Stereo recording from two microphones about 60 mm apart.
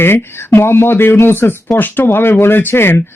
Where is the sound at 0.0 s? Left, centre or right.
Left.